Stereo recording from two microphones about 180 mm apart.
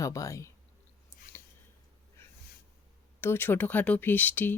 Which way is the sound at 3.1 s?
10° left (ahead or behind).